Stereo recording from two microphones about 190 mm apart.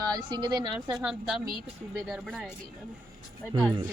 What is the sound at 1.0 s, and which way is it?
Speech, centre (ahead or behind).